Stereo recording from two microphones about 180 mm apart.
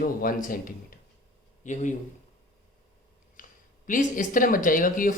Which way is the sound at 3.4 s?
50° left (ahead or behind).